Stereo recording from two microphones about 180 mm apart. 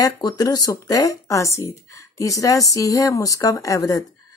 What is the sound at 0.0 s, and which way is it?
Speech, 20° left (ahead or behind).